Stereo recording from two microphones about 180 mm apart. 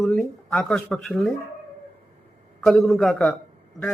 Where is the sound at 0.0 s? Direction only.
Centre (ahead or behind).